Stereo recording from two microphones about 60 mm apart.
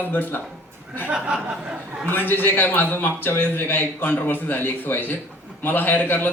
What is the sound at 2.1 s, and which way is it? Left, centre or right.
A man's voice, left.